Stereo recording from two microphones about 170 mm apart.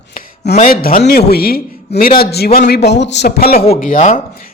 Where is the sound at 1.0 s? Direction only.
65° left (ahead or behind).